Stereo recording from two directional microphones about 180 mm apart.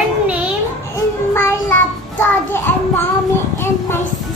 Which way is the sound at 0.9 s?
15° left (ahead or behind).